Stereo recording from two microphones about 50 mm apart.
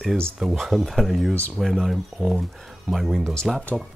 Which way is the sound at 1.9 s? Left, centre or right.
Centre.